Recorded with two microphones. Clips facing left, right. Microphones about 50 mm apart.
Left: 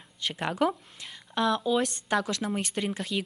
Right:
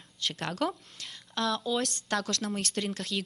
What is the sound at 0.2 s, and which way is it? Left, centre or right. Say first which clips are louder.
A woman's voice: left 4 dB; centre.